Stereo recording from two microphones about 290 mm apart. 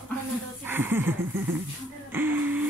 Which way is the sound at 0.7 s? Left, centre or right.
Centre.